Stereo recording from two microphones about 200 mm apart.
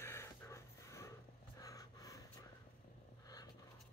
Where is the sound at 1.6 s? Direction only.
15° left (ahead or behind).